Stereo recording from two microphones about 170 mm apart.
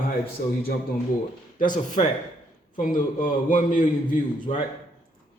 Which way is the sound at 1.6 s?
50° left (ahead or behind).